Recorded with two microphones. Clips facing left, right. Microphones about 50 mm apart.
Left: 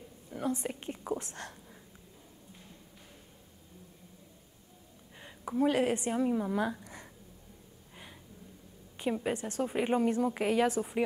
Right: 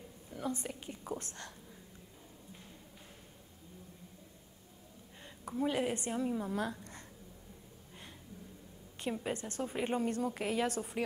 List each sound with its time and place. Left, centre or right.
0.3 s a woman's voice: left
5.2 s a sound: centre
5.7 s a woman's voice: left
9.0 s a woman's voice: centre